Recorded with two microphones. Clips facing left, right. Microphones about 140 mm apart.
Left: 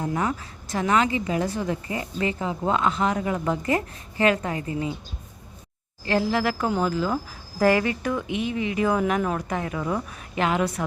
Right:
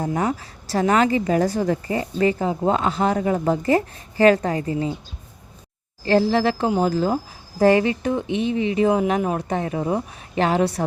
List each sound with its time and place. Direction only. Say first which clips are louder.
0.0 s a woman's voice: right 3 dB; 30° right (ahead or behind)
6.1 s speech: right 5 dB; 30° right (ahead or behind)
6.8 s a woman's voice: right 4 dB; 35° right (ahead or behind)
7.6 s speech: right 4 dB; 25° right (ahead or behind)